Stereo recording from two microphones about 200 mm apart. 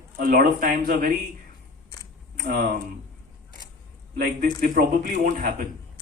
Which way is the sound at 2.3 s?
50° right (ahead or behind).